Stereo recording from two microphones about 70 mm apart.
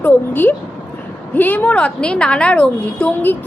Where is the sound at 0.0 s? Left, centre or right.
Left.